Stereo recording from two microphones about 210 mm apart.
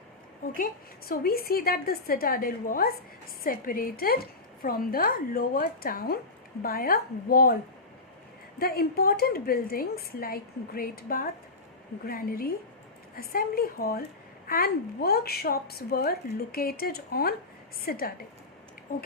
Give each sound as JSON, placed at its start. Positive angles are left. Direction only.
{"t": 0.5, "sound": "a woman's voice", "side_deg": 40}